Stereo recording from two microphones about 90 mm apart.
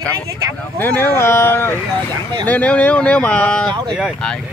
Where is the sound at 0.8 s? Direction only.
20° left (ahead or behind).